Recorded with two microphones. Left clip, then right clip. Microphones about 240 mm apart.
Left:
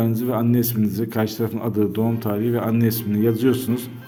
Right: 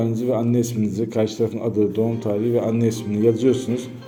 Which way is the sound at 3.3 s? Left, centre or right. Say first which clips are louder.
Right 1 dB; left.